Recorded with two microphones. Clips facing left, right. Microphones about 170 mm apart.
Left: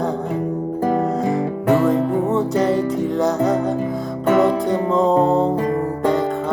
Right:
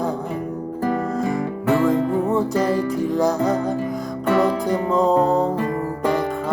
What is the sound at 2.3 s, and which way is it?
Music, 20° left (ahead or behind).